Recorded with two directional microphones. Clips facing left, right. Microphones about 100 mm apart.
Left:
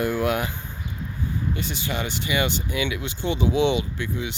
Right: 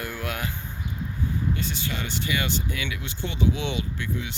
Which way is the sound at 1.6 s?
35° right (ahead or behind).